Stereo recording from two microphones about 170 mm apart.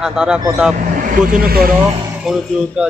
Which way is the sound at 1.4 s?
60° right (ahead or behind).